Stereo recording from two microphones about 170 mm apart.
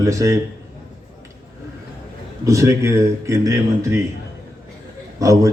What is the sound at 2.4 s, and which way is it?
Speech, 15° right (ahead or behind).